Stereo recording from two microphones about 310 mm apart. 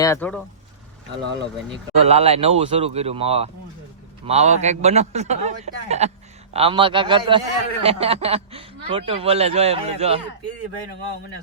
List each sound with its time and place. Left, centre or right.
0.0 s speech: centre
2.0 s a man's voice: centre